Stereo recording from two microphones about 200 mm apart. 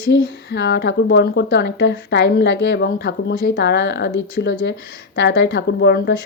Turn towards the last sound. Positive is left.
turn(degrees=55)  # may be behind; listen again after turning